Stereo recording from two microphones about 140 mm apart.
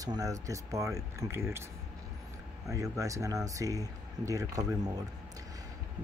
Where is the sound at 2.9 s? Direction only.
25° right (ahead or behind).